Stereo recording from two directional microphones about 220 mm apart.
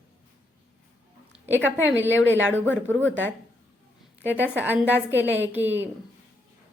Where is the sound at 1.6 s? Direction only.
10° right (ahead or behind).